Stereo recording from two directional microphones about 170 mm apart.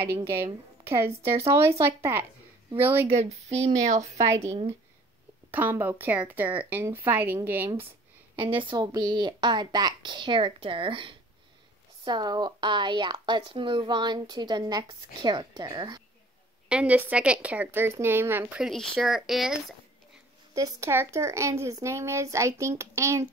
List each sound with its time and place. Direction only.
0.0 s a woman's voice: 15° right (ahead or behind)
1.0 s speech: 35° right (ahead or behind)
1.8 s a woman's voice: 15° right (ahead or behind)
3.1 s speech: 40° right (ahead or behind)
4.0 s a woman's voice: 20° right (ahead or behind)
8.4 s speech: 30° right (ahead or behind)
16.6 s a woman's voice: 10° right (ahead or behind)
20.5 s a woman's voice: 20° right (ahead or behind)